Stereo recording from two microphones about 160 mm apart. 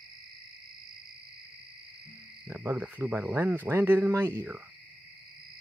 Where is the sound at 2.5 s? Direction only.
15° right (ahead or behind).